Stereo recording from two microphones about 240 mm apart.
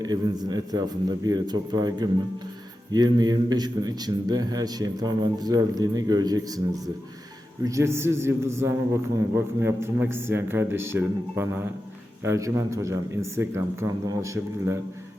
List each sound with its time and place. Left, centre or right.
0.0 s a man's voice: centre